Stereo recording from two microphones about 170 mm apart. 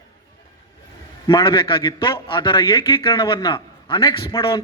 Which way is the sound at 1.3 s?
25° left (ahead or behind).